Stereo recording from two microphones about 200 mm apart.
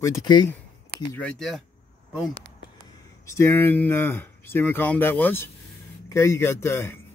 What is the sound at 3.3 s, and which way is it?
Speech, 15° left (ahead or behind).